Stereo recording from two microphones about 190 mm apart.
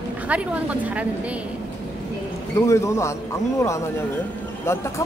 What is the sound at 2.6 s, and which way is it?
A man's voice, 15° left (ahead or behind).